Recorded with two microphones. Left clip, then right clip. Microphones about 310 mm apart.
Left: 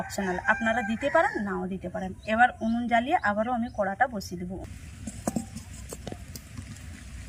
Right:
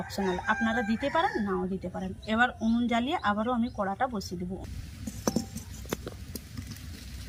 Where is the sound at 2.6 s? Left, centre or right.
Centre.